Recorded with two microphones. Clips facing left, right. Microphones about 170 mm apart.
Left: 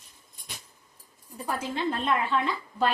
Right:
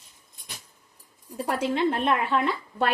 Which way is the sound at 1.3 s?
80° right.